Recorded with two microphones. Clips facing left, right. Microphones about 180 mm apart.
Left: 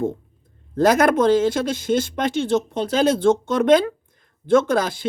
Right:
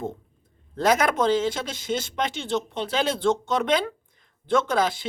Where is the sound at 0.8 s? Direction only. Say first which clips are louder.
Left 6 dB; 50° left (ahead or behind).